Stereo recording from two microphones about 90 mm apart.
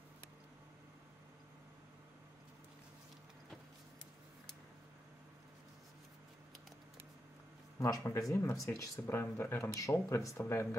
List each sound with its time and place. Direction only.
7.8 s speech: 35° left (ahead or behind)